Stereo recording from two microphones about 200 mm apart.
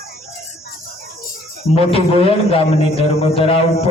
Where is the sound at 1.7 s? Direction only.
30° left (ahead or behind).